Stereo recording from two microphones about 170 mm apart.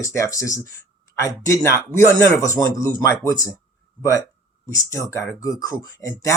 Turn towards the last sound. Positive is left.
turn(degrees=15)  # may be behind; listen again after turning